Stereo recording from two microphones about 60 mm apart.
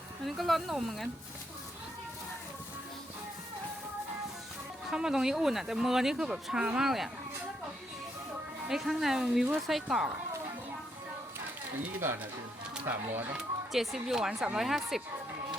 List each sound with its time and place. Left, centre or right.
0.3 s speech: centre
4.9 s speech: centre
8.7 s speech: centre
11.9 s speech: right
13.3 s speech: centre